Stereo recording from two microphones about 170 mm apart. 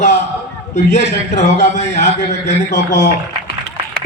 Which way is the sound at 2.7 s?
90° left.